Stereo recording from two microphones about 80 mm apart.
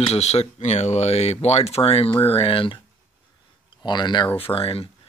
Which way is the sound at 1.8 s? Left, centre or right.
Left.